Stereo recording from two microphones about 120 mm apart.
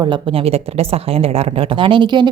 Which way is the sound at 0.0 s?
45° right (ahead or behind).